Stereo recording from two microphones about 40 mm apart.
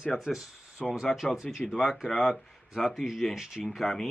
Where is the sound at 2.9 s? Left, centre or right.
Centre.